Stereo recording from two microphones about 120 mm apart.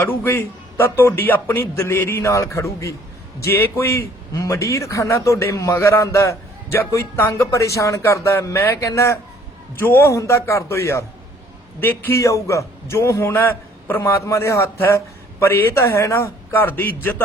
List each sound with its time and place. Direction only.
0.0 s a man's voice: 15° left (ahead or behind)